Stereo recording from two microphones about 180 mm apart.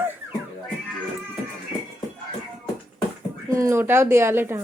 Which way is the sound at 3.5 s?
15° right (ahead or behind).